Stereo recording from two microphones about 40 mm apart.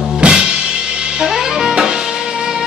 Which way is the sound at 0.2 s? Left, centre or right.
Right.